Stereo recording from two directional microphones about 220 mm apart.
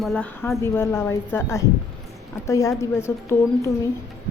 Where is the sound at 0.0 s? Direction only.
Centre (ahead or behind).